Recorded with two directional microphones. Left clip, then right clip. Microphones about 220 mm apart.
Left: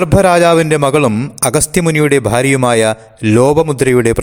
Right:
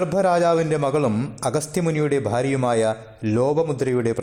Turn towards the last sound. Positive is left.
turn(degrees=35)  # may be behind; listen again after turning